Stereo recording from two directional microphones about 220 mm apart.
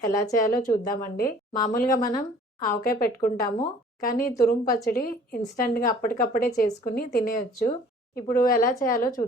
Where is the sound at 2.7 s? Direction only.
40° left (ahead or behind).